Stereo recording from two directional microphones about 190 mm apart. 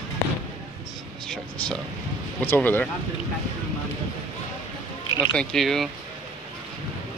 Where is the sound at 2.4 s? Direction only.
10° left (ahead or behind).